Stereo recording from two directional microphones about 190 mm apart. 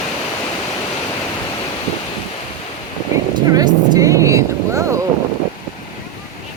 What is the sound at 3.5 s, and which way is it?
Vehicle, 20° right (ahead or behind).